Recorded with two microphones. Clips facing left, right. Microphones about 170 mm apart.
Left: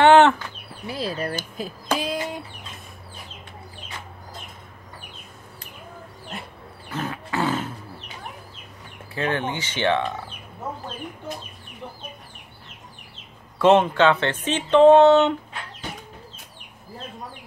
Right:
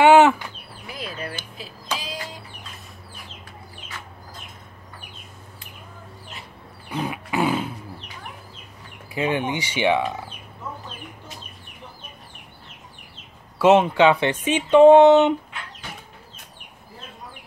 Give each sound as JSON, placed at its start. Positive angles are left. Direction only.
{"t": 0.0, "sound": "chicken", "side_deg": -10}
{"t": 0.8, "sound": "speech", "side_deg": 35}
{"t": 6.9, "sound": "roaring cats", "side_deg": -15}
{"t": 9.1, "sound": "speech", "side_deg": -15}
{"t": 13.6, "sound": "speech", "side_deg": -10}